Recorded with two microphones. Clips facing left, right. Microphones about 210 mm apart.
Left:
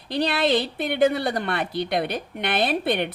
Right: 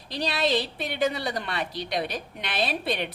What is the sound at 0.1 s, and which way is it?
A woman's voice, 60° left (ahead or behind).